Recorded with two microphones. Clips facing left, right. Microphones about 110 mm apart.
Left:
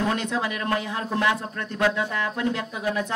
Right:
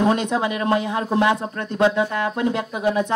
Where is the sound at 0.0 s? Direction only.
20° right (ahead or behind).